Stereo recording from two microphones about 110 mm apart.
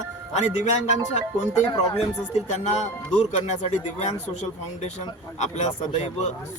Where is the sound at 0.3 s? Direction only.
90° left.